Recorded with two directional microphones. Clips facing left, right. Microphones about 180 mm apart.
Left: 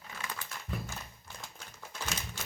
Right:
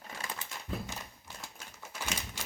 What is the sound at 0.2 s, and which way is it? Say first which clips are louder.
Crumpling: even; 25° right (ahead or behind).